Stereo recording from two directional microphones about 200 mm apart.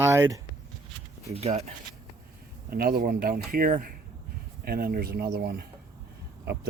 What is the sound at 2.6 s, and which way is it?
Speech, 50° right (ahead or behind).